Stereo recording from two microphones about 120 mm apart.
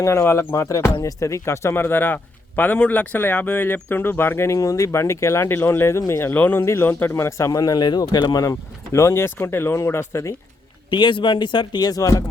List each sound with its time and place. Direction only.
0.0 s speech: 20° left (ahead or behind)
10.8 s speech: 45° left (ahead or behind)